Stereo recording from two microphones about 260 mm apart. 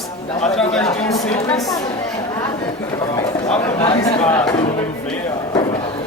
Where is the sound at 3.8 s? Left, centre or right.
Left.